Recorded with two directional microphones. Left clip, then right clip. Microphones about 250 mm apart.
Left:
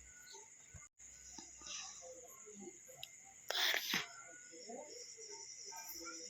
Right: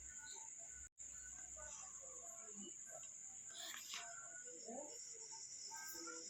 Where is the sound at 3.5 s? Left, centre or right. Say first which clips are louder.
Left 17 dB; left.